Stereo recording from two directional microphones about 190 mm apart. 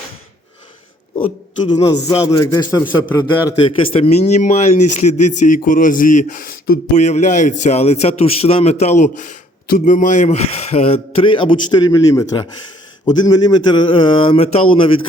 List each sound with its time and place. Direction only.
1.6 s speech: 20° left (ahead or behind)
3.9 s speech: 30° left (ahead or behind)